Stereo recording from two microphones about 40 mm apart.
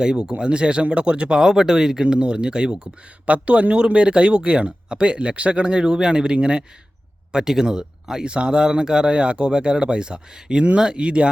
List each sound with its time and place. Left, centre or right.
0.0 s speech: centre
3.2 s speech: right
7.3 s speech: centre